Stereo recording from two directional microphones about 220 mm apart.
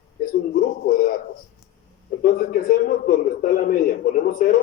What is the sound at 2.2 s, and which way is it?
Speech, 40° left (ahead or behind).